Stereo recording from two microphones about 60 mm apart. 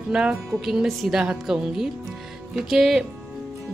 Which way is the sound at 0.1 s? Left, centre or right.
Centre.